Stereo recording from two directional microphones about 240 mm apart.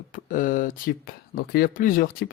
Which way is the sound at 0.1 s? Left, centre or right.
Left.